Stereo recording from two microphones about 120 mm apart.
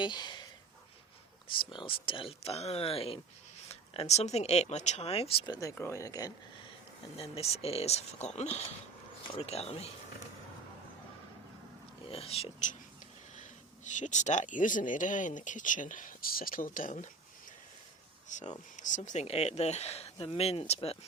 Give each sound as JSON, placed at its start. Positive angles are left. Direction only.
{"t": 0.0, "sound": "speech", "side_deg": 40}
{"t": 1.5, "sound": "speech", "side_deg": 45}
{"t": 5.5, "sound": "speech", "side_deg": 30}
{"t": 7.2, "sound": "speech", "side_deg": 60}
{"t": 9.2, "sound": "speech", "side_deg": 55}
{"t": 12.0, "sound": "speech", "side_deg": 55}
{"t": 13.8, "sound": "speech", "side_deg": 90}
{"t": 18.3, "sound": "speech", "side_deg": 90}
{"t": 19.2, "sound": "speech", "side_deg": 60}